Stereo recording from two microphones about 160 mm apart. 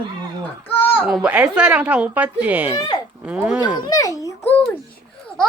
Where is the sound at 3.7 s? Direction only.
20° left (ahead or behind).